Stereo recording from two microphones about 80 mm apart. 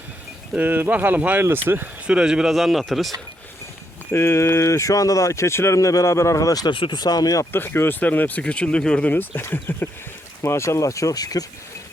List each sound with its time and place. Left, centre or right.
0.5 s speech: right
2.0 s speech: centre
4.1 s speech: left
6.7 s speech: left
7.5 s speech: left